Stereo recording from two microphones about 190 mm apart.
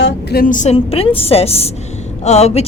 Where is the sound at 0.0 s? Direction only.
55° left (ahead or behind).